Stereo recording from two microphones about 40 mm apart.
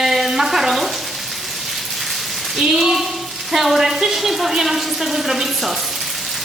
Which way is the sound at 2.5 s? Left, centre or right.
Centre.